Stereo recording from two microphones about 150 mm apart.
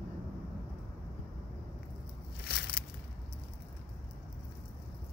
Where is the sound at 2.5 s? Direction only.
90° left.